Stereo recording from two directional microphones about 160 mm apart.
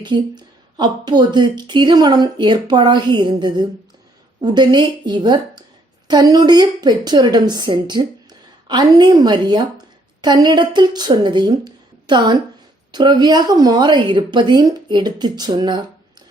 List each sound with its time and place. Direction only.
0.0 s a woman's voice: 30° right (ahead or behind)